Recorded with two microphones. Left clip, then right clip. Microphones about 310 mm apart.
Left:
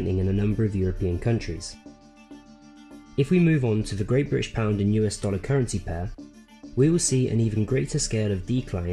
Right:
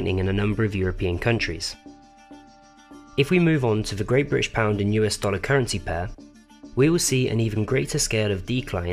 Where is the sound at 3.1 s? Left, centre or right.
Right.